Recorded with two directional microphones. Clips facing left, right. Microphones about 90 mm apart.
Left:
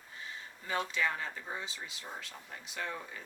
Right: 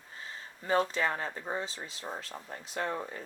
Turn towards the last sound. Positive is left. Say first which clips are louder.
# right 6 dB
turn(degrees=-40)  # may be behind; listen again after turning